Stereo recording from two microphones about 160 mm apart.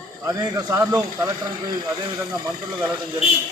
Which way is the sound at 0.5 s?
20° right (ahead or behind).